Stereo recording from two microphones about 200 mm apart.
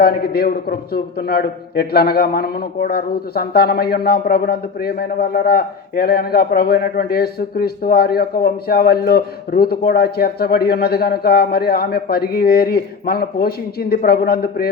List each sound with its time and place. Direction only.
0.0 s a man's voice: 50° left (ahead or behind)